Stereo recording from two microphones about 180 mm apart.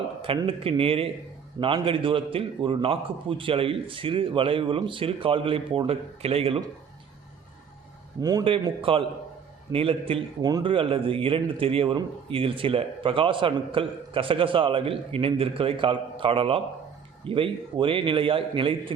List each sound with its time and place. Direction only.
0.2 s a man's voice: 30° right (ahead or behind)
8.2 s a man's voice: 20° right (ahead or behind)